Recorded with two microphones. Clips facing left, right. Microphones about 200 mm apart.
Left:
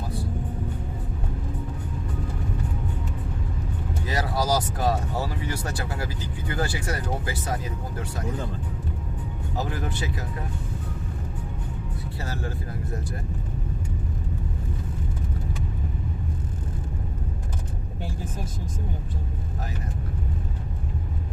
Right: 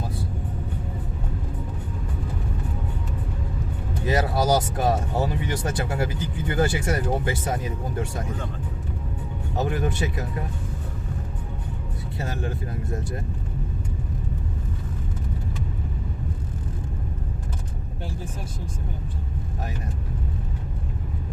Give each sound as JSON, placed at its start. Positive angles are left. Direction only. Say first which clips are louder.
{"t": 4.0, "sound": "speech", "louder": "right 5 dB", "side_deg": -20}
{"t": 9.6, "sound": "speech", "louder": "right 5 dB", "side_deg": -25}
{"t": 12.2, "sound": "speech", "louder": "right 3 dB", "side_deg": -20}